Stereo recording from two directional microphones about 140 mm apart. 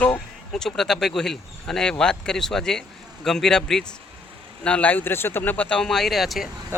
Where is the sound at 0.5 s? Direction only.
5° left (ahead or behind).